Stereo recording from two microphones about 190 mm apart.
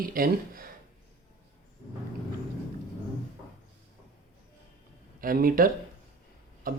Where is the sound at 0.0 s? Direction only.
50° right (ahead or behind).